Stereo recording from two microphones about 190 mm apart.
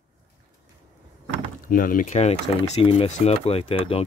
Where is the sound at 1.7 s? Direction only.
45° left (ahead or behind).